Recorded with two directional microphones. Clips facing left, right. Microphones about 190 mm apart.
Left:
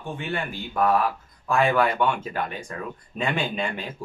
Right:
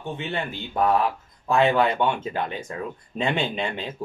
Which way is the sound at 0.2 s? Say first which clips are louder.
Even; 20° right (ahead or behind).